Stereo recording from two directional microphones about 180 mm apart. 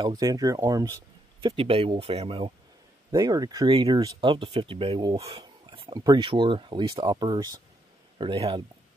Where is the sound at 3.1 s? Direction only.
20° right (ahead or behind).